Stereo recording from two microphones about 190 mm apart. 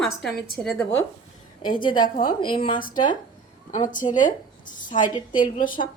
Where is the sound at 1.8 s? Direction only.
25° left (ahead or behind).